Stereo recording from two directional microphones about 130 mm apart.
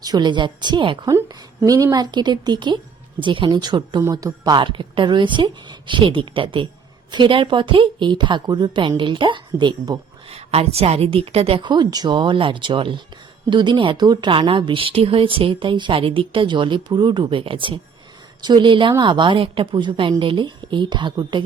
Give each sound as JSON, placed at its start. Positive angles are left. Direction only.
{"t": 0.0, "sound": "speech", "side_deg": -35}
{"t": 10.2, "sound": "speech", "side_deg": -50}